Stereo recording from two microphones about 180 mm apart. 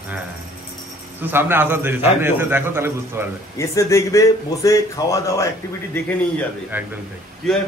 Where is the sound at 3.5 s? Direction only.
15° left (ahead or behind).